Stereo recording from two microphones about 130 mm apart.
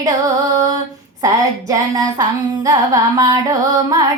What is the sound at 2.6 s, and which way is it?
Female singing, 25° right (ahead or behind).